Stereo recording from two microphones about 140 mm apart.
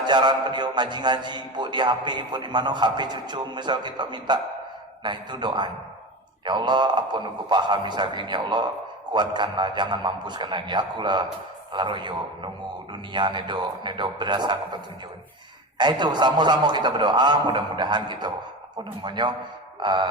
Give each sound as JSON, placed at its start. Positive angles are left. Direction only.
{"t": 0.0, "sound": "a man's voice", "side_deg": -30}
{"t": 15.8, "sound": "a man's voice", "side_deg": -30}